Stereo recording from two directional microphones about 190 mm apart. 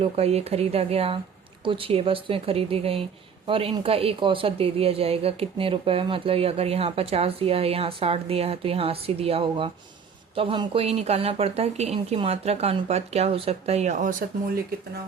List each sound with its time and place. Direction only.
0.0 s a woman's voice: 35° right (ahead or behind)